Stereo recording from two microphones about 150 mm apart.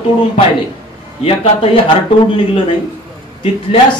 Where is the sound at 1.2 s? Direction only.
40° left (ahead or behind).